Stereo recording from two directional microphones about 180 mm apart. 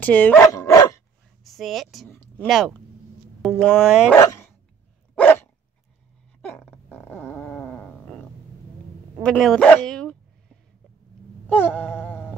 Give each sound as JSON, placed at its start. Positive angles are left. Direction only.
{"t": 0.0, "sound": "dog", "side_deg": 10}
{"t": 1.4, "sound": "a woman's voice", "side_deg": 0}
{"t": 2.0, "sound": "a sound", "side_deg": 10}
{"t": 2.4, "sound": "speech", "side_deg": 0}
{"t": 4.1, "sound": "speech", "side_deg": 10}
{"t": 5.1, "sound": "dog", "side_deg": 10}
{"t": 6.4, "sound": "dog", "side_deg": 10}
{"t": 9.2, "sound": "speech", "side_deg": 5}
{"t": 11.4, "sound": "a sound", "side_deg": 10}